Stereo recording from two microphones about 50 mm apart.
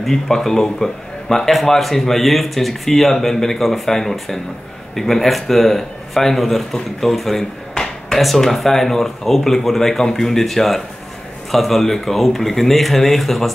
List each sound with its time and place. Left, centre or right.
0.0 s a man's voice: centre